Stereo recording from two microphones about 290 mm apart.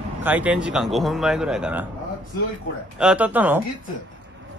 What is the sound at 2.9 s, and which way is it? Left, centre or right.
Speech, centre.